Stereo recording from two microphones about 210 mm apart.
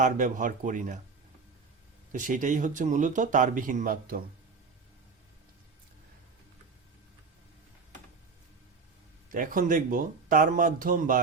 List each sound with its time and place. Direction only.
0.0 s speech: 40° right (ahead or behind)
2.1 s speech: 40° right (ahead or behind)
9.3 s speech: 40° right (ahead or behind)